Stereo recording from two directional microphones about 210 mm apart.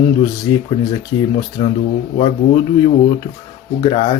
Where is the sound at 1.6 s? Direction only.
25° left (ahead or behind).